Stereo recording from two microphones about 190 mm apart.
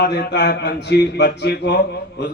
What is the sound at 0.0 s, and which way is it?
A man's voice, 60° left (ahead or behind).